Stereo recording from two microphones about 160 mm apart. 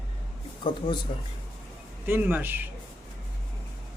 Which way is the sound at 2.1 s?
10° right (ahead or behind).